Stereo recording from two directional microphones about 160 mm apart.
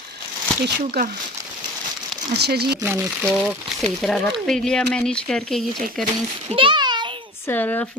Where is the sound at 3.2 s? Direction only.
Centre (ahead or behind).